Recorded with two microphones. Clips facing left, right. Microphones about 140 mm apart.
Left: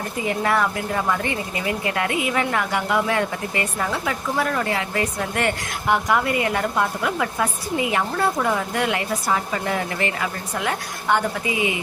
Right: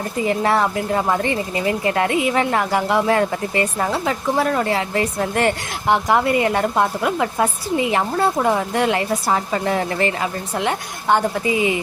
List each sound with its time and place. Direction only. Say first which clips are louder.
0.3 s a woman's voice: right 3 dB; 30° right (ahead or behind)